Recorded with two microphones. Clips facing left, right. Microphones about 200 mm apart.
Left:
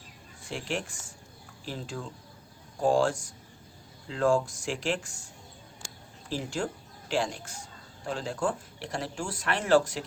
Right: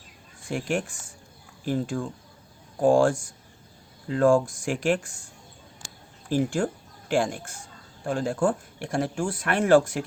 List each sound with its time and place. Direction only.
0.5 s speech: 50° right (ahead or behind)
6.2 s speech: 50° right (ahead or behind)